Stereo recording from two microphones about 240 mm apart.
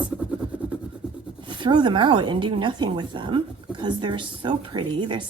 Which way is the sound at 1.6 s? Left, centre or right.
Centre.